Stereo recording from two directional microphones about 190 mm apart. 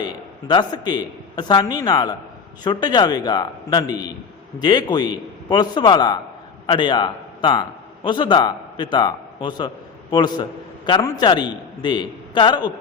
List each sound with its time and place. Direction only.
0.0 s a woman's voice: 20° left (ahead or behind)